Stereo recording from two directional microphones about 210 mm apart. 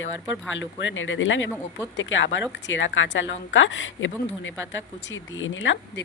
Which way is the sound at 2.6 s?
65° left (ahead or behind).